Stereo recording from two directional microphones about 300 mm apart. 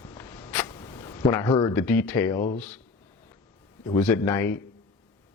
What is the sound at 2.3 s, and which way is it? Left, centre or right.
Speech, left.